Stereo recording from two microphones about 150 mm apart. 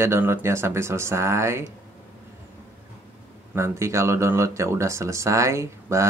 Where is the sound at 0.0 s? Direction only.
15° right (ahead or behind).